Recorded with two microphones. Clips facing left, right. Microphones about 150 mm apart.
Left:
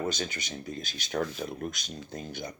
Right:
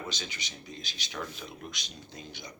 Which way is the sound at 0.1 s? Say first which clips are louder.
Left 7 dB; 50° left (ahead or behind).